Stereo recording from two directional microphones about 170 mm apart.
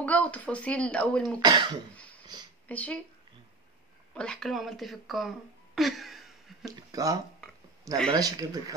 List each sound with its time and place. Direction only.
0.0 s speech: 10° left (ahead or behind)
1.4 s speech: 25° right (ahead or behind)
2.7 s speech: 10° left (ahead or behind)
4.1 s speech: 5° left (ahead or behind)
5.8 s a sound: centre (ahead or behind)
6.6 s speech: 20° right (ahead or behind)